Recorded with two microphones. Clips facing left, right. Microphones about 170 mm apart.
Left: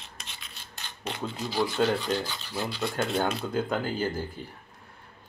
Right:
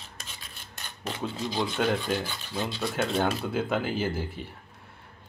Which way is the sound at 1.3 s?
20° right (ahead or behind).